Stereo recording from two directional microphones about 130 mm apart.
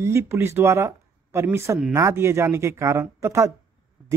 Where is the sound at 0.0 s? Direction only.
20° right (ahead or behind).